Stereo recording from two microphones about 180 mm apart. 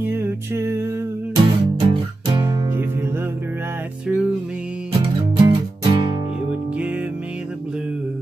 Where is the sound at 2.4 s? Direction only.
25° right (ahead or behind).